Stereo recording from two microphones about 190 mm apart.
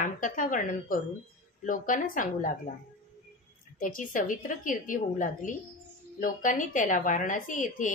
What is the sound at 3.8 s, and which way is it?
Speech, 45° left (ahead or behind).